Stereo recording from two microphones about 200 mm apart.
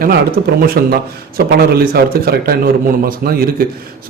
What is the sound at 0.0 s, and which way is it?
A man's voice, 50° right (ahead or behind).